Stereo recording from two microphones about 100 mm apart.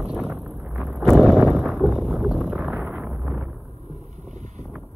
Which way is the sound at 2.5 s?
15° right (ahead or behind).